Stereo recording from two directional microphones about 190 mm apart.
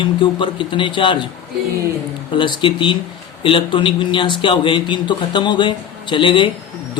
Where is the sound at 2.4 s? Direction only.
25° left (ahead or behind).